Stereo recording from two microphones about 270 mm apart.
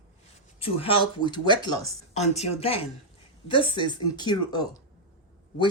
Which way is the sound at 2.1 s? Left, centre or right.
Left.